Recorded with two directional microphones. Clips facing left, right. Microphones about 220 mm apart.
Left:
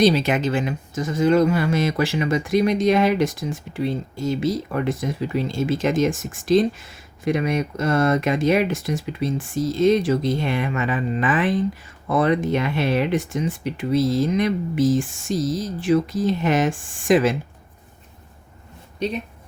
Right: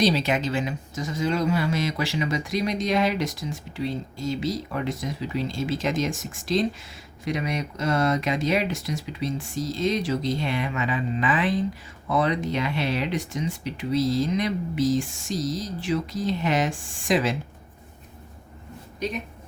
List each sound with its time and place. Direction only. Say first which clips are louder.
0.0 s speech: left 5 dB; 50° left (ahead or behind)